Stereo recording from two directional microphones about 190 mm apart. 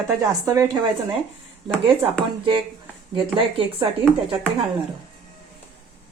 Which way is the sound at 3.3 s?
30° right (ahead or behind).